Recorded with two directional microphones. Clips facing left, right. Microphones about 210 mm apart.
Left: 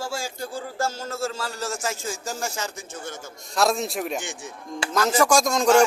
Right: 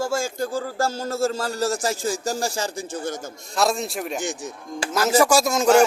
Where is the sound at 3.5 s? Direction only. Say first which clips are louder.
Even; centre (ahead or behind).